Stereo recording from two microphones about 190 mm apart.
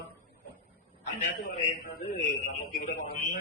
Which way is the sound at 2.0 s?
35° left (ahead or behind).